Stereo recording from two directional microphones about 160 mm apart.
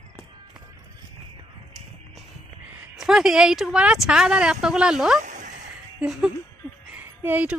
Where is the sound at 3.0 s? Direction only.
5° right (ahead or behind).